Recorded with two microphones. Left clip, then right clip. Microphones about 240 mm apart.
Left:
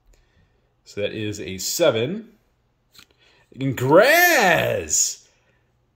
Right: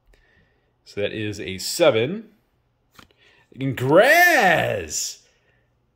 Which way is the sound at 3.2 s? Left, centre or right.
Centre.